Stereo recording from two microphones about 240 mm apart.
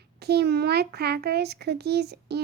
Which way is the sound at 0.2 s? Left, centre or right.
Right.